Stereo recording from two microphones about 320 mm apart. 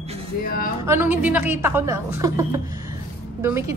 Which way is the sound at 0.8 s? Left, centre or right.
Centre.